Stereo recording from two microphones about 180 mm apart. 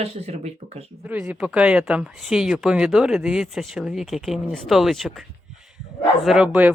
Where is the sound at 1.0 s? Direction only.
10° right (ahead or behind).